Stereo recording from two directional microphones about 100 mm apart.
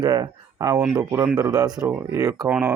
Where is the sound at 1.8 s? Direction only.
20° right (ahead or behind).